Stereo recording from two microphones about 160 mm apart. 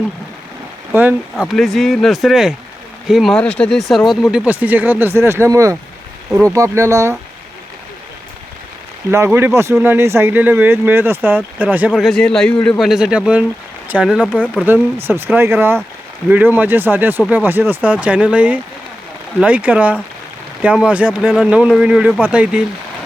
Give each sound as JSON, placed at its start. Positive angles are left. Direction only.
{"t": 0.9, "sound": "speech", "side_deg": -15}
{"t": 1.4, "sound": "speech", "side_deg": 0}
{"t": 9.0, "sound": "speech", "side_deg": -15}
{"t": 11.9, "sound": "speech", "side_deg": 0}